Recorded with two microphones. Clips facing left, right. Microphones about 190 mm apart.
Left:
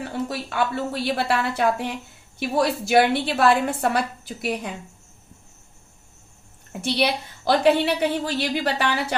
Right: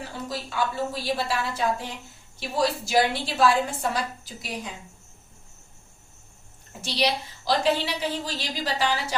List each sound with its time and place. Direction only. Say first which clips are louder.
0.1 s a woman's voice: left 5 dB; 60° left (ahead or behind)
6.8 s a woman's voice: left 3 dB; 55° left (ahead or behind)